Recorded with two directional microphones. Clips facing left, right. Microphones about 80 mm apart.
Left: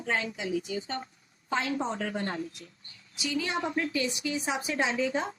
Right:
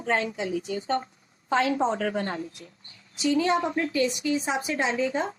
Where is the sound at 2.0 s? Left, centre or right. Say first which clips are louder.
Right 5 dB; right.